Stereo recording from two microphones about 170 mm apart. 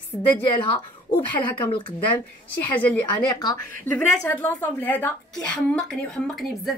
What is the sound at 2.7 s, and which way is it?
Speech, 10° left (ahead or behind).